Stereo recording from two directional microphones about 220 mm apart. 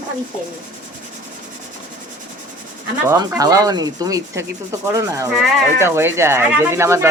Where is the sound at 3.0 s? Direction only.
15° right (ahead or behind).